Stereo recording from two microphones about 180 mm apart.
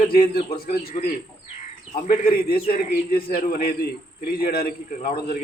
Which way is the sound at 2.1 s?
55° left (ahead or behind).